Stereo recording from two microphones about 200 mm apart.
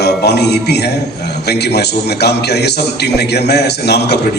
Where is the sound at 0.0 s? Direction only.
55° left (ahead or behind).